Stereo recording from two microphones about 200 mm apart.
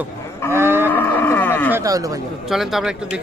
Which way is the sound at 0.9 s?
10° left (ahead or behind).